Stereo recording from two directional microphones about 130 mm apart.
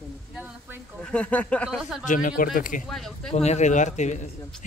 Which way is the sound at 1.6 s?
5° right (ahead or behind).